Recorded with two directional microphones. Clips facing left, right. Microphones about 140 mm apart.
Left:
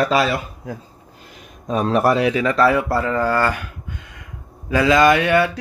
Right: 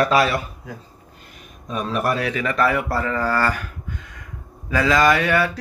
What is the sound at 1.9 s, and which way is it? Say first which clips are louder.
Speech: left 6 dB; 30° left (ahead or behind).